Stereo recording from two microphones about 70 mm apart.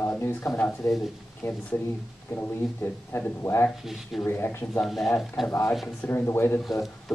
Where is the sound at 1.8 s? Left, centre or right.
Left.